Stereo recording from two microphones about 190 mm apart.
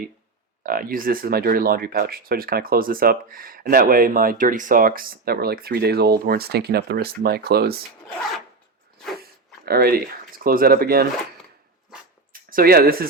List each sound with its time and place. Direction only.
0.6 s speech: 50° right (ahead or behind)
9.6 s speech: 55° right (ahead or behind)
12.5 s speech: 50° right (ahead or behind)